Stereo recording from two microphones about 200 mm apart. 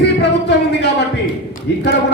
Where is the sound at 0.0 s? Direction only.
55° left (ahead or behind).